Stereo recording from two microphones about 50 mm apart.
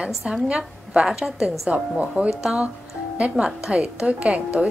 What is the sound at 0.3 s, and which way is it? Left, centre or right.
A woman's voice, right.